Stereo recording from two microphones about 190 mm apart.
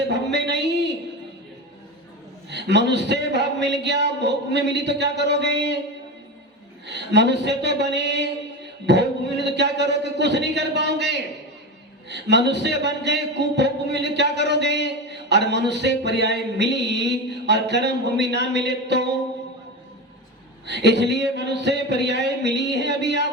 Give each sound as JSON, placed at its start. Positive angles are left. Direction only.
{"t": 0.0, "sound": "speech", "side_deg": -65}
{"t": 2.5, "sound": "a man's voice", "side_deg": -65}
{"t": 6.8, "sound": "a man's voice", "side_deg": -65}
{"t": 20.7, "sound": "a man's voice", "side_deg": -65}